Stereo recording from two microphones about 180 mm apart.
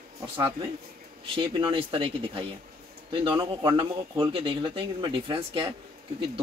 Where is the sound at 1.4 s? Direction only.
30° right (ahead or behind).